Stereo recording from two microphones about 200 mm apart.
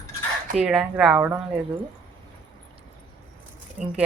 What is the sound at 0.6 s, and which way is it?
Speech, 5° right (ahead or behind).